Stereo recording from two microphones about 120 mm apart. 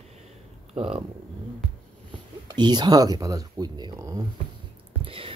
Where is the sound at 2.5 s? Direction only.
40° right (ahead or behind).